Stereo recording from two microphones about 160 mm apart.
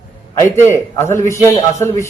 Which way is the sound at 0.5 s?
15° left (ahead or behind).